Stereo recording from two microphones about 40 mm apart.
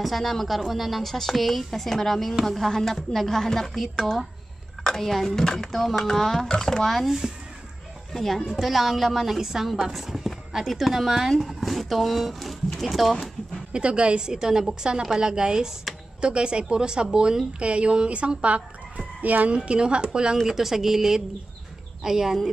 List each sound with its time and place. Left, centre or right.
0.0 s speech: centre
7.0 s speech: centre
8.1 s speech: centre
13.7 s a woman's voice: right
17.6 s speech: right
19.5 s a woman's voice: right
20.4 s a woman's voice: centre